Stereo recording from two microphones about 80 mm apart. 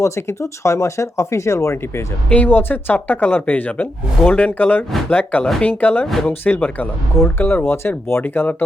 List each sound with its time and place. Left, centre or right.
0.0 s speech: left
2.3 s speech: left